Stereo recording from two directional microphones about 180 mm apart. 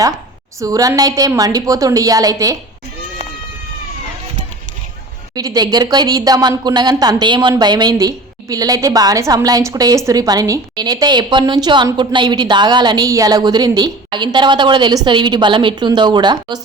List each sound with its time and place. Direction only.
0.6 s a woman's voice: 20° right (ahead or behind)
5.3 s a woman's voice: 20° right (ahead or behind)